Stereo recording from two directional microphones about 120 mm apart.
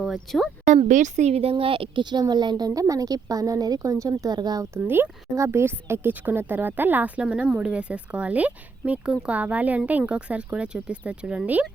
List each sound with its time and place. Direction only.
0.0 s speech: centre (ahead or behind)
0.9 s speech: 90° right; by 11.6 s 10° right (ahead or behind)